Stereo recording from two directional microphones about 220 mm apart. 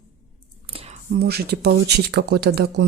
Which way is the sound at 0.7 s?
25° right (ahead or behind).